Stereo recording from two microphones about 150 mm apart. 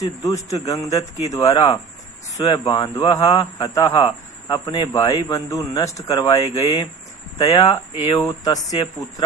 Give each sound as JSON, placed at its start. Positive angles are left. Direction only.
{"t": 0.0, "sound": "a man's voice", "side_deg": 20}
{"t": 7.3, "sound": "speech", "side_deg": 40}
{"t": 8.3, "sound": "a man's voice", "side_deg": 25}